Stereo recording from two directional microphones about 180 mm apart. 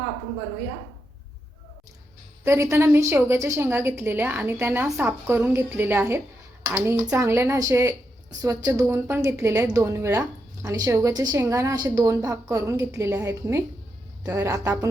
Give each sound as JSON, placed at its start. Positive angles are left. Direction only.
{"t": 2.4, "sound": "a woman's voice", "side_deg": -15}